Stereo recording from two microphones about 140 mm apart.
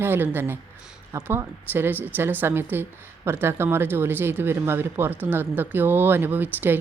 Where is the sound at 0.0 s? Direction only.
15° right (ahead or behind).